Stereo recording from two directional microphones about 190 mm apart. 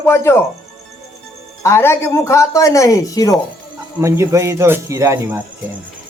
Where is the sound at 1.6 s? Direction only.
15° left (ahead or behind).